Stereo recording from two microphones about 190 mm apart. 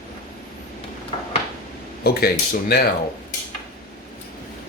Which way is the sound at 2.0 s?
55° left (ahead or behind).